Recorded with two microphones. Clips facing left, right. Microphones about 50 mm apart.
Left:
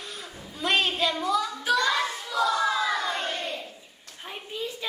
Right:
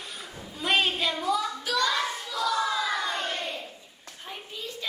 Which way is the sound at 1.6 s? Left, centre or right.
Centre.